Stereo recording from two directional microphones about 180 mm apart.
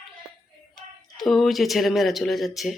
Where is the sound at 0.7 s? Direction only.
Centre (ahead or behind).